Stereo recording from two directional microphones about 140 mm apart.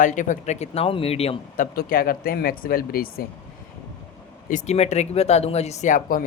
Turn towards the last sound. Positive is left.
turn(degrees=80)